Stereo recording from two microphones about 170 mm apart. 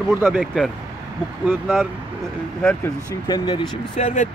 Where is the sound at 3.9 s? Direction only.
40° left (ahead or behind).